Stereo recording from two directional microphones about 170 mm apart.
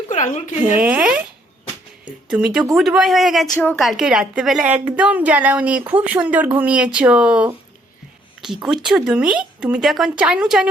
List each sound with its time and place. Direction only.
0.1 s speech: 45° left (ahead or behind)
0.8 s a woman's voice: 5° right (ahead or behind)
2.3 s a woman's voice: 5° right (ahead or behind)
8.6 s speech: 5° right (ahead or behind)